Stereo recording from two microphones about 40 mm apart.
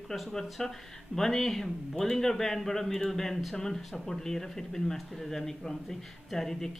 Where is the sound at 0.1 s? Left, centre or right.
Centre.